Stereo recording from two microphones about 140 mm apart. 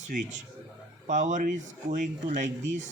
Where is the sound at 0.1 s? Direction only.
60° right (ahead or behind).